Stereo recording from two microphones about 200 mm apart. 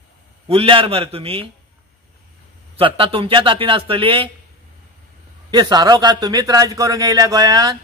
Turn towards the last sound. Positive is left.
turn(degrees=-20)  # may be behind; listen again after turning